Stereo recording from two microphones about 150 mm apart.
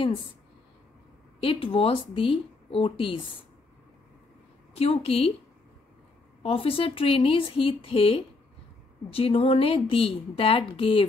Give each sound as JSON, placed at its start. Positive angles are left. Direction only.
{"t": 1.4, "sound": "speech", "side_deg": 35}
{"t": 4.7, "sound": "speech", "side_deg": 40}
{"t": 6.4, "sound": "speech", "side_deg": 40}